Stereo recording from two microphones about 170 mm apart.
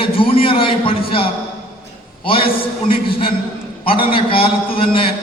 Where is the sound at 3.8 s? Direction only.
30° left (ahead or behind).